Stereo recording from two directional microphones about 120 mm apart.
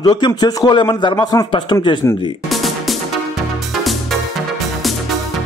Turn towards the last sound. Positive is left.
turn(degrees=0)  # may be behind; listen again after turning